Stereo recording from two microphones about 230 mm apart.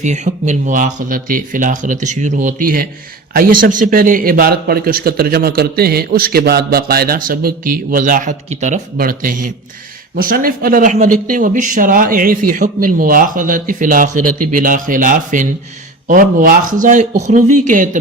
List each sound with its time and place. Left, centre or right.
0.0 s a man's voice: right